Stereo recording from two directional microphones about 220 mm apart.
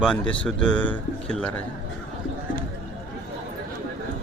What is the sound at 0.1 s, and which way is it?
A man's voice, 5° left (ahead or behind).